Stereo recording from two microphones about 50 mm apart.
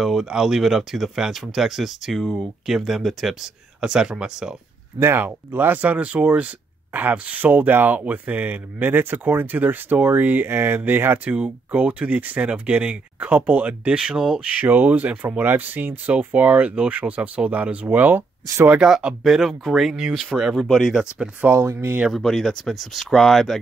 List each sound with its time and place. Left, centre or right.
0.0 s speech: centre
3.8 s speech: centre
4.9 s speech: right
5.5 s speech: right
5.8 s speech: right
11.7 s speech: right
13.9 s speech: centre
14.6 s speech: right
18.8 s speech: centre
19.9 s speech: centre
21.5 s speech: right
22.1 s speech: centre